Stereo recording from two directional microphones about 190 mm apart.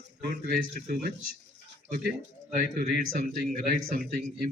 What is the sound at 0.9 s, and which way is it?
Speech, 50° right (ahead or behind).